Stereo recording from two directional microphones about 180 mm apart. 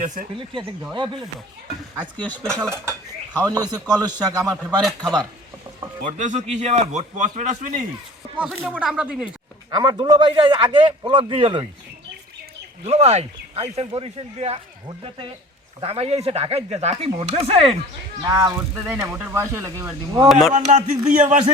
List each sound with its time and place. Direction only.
2.1 s speech: 10° left (ahead or behind)
3.4 s a man's voice: 20° right (ahead or behind)
4.8 s speech: centre (ahead or behind)
6.1 s speech: 40° right (ahead or behind)
8.4 s speech: 5° right (ahead or behind)
9.6 s a man's voice: 20° right (ahead or behind)
12.8 s a man's voice: 35° right (ahead or behind)
18.3 s speech: 15° right (ahead or behind)
20.2 s speech: centre (ahead or behind)
20.5 s speech: 40° right (ahead or behind)